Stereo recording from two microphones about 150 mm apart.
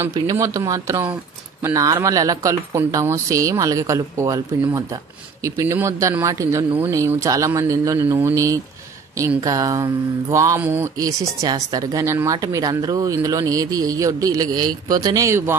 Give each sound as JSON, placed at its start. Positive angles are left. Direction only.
{"t": 0.1, "sound": "speech", "side_deg": -25}